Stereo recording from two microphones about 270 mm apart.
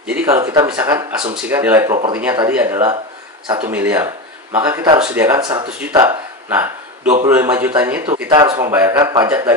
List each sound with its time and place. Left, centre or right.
0.0 s speech: centre